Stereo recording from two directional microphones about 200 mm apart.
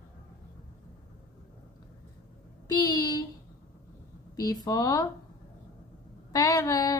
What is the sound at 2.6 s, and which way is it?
Speech, 20° left (ahead or behind).